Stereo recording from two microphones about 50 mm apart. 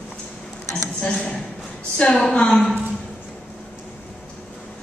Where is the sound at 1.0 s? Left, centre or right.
Centre.